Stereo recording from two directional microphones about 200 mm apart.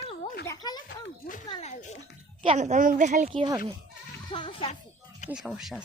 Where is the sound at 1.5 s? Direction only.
35° left (ahead or behind).